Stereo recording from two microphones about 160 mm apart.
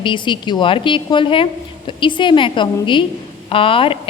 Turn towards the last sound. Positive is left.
turn(degrees=35)  # may be behind; listen again after turning